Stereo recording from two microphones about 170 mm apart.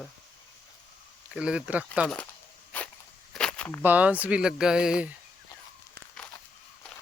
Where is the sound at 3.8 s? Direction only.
10° right (ahead or behind).